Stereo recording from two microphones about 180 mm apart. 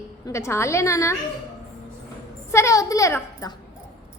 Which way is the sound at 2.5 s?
15° left (ahead or behind).